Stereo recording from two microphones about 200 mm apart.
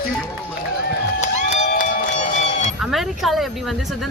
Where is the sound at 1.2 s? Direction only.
35° left (ahead or behind).